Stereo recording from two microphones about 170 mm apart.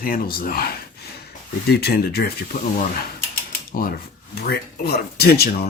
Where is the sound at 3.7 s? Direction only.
60° left (ahead or behind).